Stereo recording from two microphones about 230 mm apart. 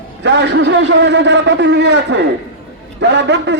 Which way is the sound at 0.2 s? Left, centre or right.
Right.